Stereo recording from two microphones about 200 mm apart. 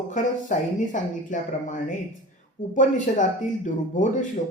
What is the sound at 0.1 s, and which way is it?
Speech, 40° left (ahead or behind).